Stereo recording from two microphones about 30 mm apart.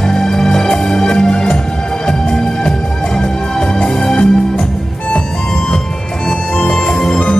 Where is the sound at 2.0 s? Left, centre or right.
Left.